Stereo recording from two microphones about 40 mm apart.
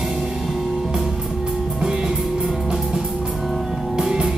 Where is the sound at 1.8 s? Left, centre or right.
Centre.